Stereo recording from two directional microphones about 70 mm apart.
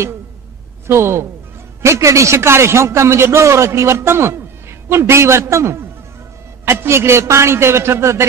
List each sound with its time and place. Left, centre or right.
0.8 s a man's voice: right